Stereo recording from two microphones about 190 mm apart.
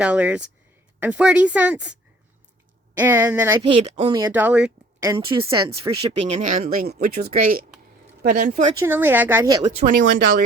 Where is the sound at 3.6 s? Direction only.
25° right (ahead or behind).